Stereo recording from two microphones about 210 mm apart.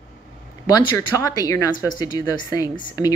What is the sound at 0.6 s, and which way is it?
A woman's voice, 15° left (ahead or behind).